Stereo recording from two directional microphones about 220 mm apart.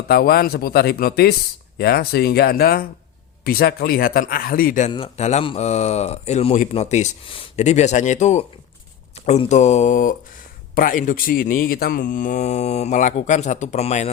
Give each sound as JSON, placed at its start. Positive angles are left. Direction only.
{"t": 0.1, "sound": "speech", "side_deg": 45}
{"t": 4.9, "sound": "speech", "side_deg": 25}